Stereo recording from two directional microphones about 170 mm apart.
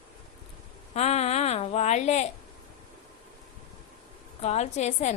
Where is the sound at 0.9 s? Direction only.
40° left (ahead or behind).